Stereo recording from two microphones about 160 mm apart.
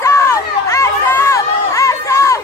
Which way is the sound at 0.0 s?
20° left (ahead or behind).